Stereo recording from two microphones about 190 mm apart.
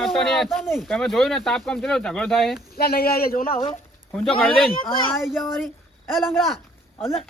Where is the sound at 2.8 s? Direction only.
55° left (ahead or behind).